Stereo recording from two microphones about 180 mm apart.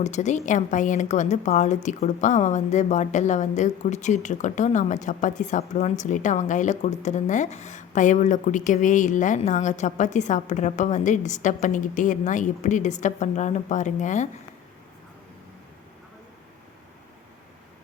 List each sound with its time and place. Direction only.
0.0 s a woman's voice: 40° left (ahead or behind)